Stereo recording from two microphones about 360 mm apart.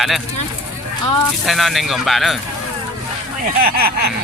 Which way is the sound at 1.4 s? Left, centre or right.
Centre.